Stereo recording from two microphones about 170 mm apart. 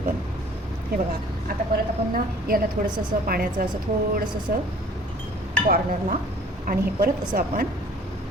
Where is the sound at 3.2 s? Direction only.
55° right (ahead or behind).